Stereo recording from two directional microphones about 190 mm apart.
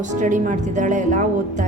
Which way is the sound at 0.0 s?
40° right (ahead or behind).